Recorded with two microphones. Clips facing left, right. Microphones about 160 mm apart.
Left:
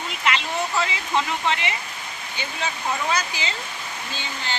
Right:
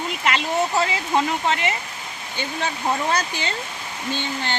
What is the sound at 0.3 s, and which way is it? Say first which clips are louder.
Speech: right 3 dB; 45° right (ahead or behind).